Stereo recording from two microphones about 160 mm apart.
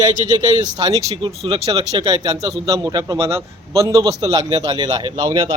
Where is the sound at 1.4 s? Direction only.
40° right (ahead or behind).